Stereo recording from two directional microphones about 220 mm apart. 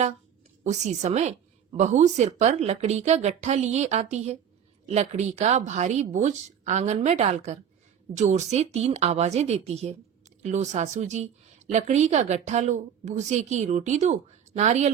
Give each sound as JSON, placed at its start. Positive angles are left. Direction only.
{"t": 0.6, "sound": "a woman's voice", "side_deg": -30}